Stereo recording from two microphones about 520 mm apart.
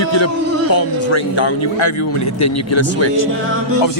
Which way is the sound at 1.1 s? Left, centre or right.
Left.